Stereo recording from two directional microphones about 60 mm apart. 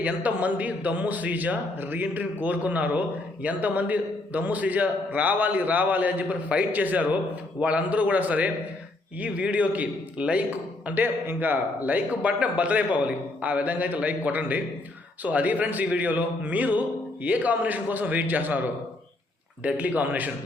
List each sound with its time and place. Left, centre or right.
0.0 s a man's voice: right
10.8 s a man's voice: right